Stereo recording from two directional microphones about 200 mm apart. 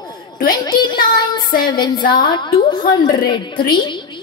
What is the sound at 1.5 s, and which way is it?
Music, 45° left (ahead or behind).